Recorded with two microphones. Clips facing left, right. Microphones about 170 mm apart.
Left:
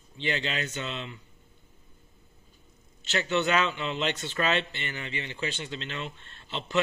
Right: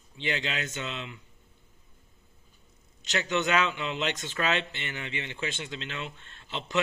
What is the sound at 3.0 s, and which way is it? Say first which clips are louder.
Speech: left 1 dB; 10° right (ahead or behind).